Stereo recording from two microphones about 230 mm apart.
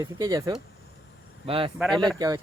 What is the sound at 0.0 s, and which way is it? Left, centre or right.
Speech, centre.